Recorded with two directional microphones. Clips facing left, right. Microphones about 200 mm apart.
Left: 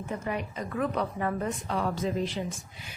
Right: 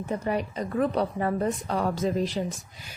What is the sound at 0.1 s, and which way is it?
A woman's voice, 35° right (ahead or behind).